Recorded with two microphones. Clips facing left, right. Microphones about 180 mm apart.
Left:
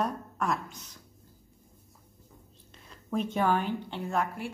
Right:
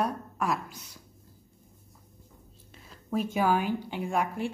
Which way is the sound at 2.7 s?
5° right (ahead or behind).